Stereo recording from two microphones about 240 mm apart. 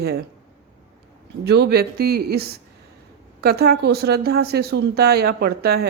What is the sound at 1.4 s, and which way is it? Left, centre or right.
Speech, right.